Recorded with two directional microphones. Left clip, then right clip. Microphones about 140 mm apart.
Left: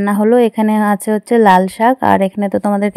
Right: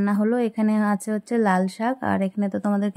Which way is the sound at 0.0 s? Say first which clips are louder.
Left 12 dB; 50° left (ahead or behind).